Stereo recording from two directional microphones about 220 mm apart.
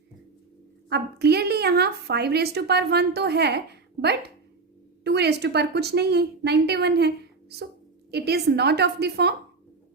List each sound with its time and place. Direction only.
0.9 s a woman's voice: 50° right (ahead or behind)